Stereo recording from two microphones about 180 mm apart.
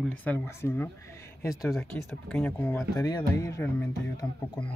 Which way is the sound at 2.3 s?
10° left (ahead or behind).